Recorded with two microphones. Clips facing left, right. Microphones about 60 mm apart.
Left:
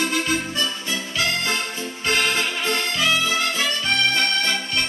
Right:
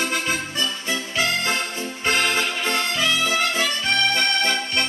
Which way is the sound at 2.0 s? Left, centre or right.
Right.